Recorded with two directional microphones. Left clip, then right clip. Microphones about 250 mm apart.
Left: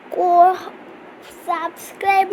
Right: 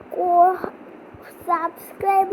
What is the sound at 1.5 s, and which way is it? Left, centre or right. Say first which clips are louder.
Speech: right 1 dB; centre.